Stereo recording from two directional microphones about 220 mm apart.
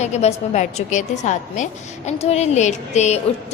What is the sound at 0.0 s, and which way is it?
A woman's voice, 30° left (ahead or behind).